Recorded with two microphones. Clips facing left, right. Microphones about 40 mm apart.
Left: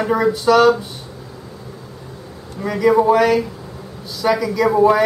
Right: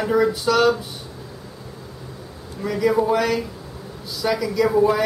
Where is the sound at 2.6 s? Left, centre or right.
Centre.